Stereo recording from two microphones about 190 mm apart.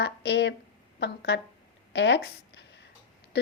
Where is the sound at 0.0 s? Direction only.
65° left (ahead or behind).